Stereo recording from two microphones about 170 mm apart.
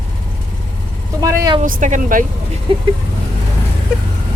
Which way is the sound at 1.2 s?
20° right (ahead or behind).